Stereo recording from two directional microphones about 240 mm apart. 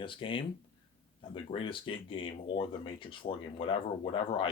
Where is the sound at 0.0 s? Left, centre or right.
Left.